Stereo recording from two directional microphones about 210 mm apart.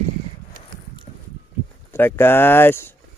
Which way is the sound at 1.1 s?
35° left (ahead or behind).